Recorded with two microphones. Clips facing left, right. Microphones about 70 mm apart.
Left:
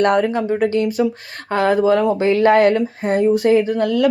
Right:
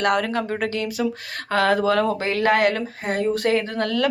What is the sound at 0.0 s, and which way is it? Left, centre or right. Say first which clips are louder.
Speech: left 5 dB; left.